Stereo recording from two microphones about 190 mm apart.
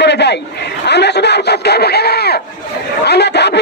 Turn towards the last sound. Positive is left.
turn(degrees=60)  # may be behind; listen again after turning